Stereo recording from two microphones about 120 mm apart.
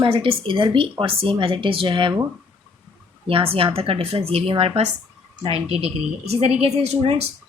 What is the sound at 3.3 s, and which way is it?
Speech, 50° right (ahead or behind).